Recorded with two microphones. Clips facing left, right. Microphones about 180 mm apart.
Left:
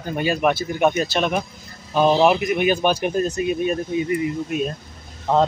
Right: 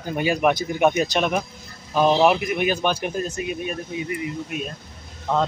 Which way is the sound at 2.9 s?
40° left (ahead or behind).